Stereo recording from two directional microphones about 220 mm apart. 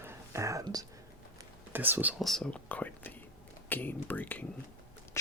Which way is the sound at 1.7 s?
10° right (ahead or behind).